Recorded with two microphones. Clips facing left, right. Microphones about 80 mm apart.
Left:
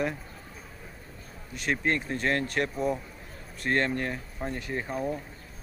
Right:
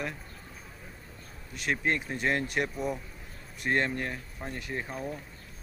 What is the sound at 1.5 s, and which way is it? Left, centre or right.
Speech, centre.